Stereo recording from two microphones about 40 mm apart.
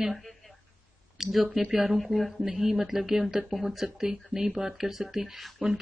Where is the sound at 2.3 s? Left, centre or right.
Centre.